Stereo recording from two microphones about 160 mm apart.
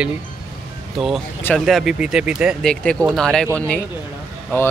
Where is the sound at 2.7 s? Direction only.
5° left (ahead or behind).